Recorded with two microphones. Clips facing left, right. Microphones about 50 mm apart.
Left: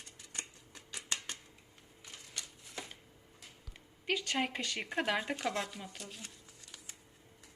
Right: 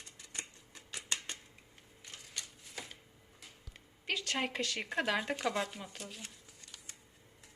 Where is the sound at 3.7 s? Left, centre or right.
Centre.